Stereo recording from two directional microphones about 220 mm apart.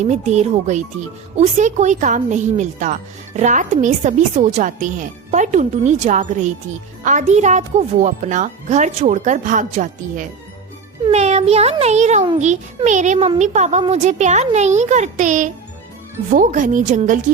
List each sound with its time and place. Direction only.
0.0 s a woman's voice: 30° right (ahead or behind)